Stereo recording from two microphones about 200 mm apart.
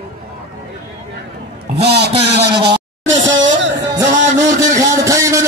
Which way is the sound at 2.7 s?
70° right (ahead or behind).